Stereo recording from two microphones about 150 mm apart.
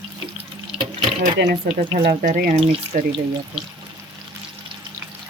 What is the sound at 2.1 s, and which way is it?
Speech, 70° right (ahead or behind).